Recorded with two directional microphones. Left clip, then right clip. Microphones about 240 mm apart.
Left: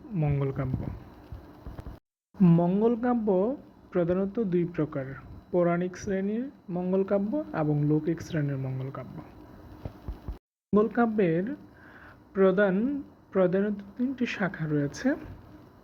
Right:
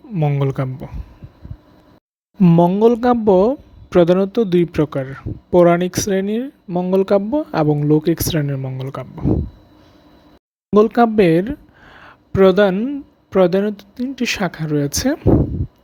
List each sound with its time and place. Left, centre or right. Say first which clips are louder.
0.1 s speech: right 11 dB; right
2.4 s speech: right 12 dB; right
10.7 s speech: right 12 dB; right